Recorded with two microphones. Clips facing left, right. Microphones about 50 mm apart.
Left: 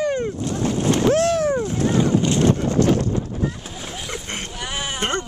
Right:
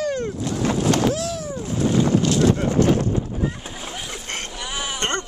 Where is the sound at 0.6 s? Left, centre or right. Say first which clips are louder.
Even; right.